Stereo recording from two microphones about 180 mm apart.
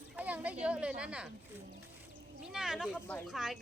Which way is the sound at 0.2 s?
10° right (ahead or behind).